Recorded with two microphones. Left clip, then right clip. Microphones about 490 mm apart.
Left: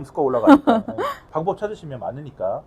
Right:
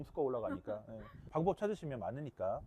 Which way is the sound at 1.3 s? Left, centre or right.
Right.